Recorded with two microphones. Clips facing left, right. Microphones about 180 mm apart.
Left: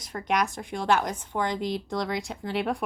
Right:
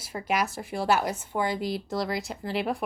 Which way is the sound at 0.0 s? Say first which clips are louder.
Left 1 dB; 5° right (ahead or behind).